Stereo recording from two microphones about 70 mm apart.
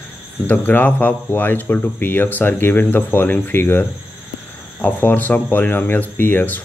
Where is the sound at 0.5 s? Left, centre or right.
Left.